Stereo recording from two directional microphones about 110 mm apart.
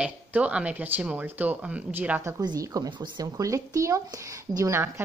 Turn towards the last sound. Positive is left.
turn(degrees=-25)  # may be behind; listen again after turning